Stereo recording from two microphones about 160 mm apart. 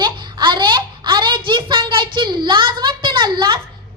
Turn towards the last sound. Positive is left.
turn(degrees=-30)  # may be behind; listen again after turning